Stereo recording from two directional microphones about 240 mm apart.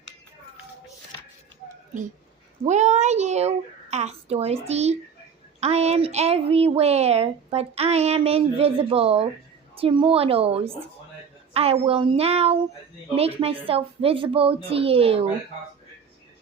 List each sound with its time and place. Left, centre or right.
2.6 s a woman's voice: right